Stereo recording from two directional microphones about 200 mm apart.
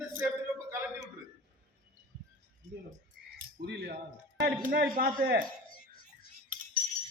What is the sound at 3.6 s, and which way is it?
A man's voice, 55° right (ahead or behind).